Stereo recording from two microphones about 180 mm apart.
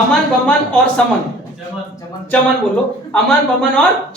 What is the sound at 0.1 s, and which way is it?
Speech, 5° left (ahead or behind).